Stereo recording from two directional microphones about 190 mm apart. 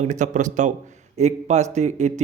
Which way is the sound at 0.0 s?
40° right (ahead or behind).